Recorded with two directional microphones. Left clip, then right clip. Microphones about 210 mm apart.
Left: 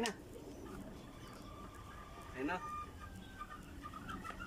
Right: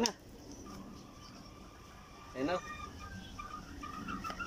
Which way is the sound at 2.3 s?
20° right (ahead or behind).